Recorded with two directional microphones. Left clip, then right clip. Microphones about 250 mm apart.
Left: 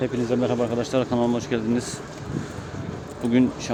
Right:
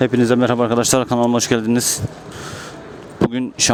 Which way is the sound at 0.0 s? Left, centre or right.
Right.